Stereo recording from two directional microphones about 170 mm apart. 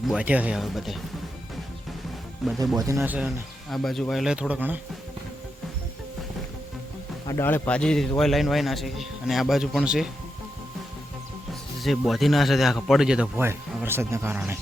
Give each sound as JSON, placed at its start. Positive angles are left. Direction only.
{"t": 0.1, "sound": "a man's voice", "side_deg": -5}
{"t": 2.4, "sound": "a man's voice", "side_deg": 0}
{"t": 2.7, "sound": "speech", "side_deg": -20}
{"t": 3.0, "sound": "a man's voice", "side_deg": -5}
{"t": 7.3, "sound": "a man's voice", "side_deg": 15}
{"t": 11.8, "sound": "a man's voice", "side_deg": 0}